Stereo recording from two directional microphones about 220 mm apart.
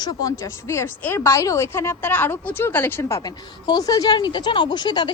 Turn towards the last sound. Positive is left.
turn(degrees=20)  # may be behind; listen again after turning